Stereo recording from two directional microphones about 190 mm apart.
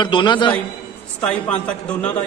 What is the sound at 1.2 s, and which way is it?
Speech, 5° left (ahead or behind).